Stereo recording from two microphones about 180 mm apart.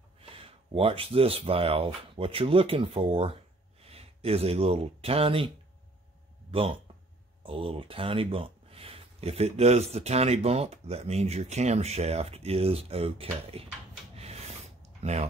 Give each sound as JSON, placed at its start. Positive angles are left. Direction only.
{"t": 0.2, "sound": "speech", "side_deg": -30}
{"t": 6.5, "sound": "speech", "side_deg": -30}
{"t": 14.1, "sound": "a sound", "side_deg": -35}